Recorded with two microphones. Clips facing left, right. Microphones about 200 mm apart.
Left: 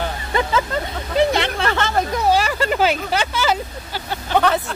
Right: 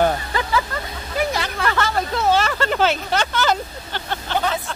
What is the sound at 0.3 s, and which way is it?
Hubbub, 25° left (ahead or behind).